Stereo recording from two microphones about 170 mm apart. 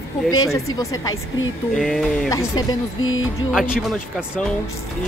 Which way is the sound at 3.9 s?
Centre (ahead or behind).